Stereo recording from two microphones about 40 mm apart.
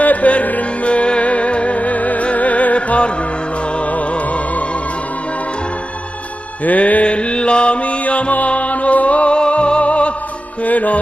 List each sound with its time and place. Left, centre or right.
0.0 s music: left
6.6 s music: left